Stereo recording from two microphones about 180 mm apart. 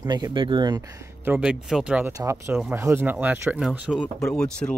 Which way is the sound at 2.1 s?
15° right (ahead or behind).